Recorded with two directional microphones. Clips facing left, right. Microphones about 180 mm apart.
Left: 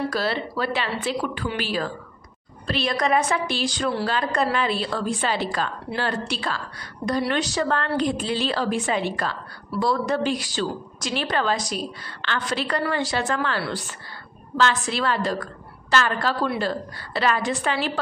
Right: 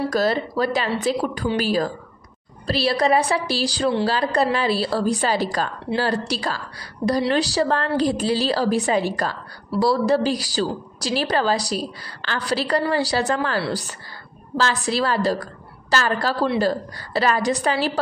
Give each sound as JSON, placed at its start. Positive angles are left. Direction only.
{"t": 0.1, "sound": "a woman's voice", "side_deg": -45}